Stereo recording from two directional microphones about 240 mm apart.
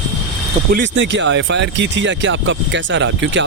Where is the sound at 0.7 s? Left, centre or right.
Right.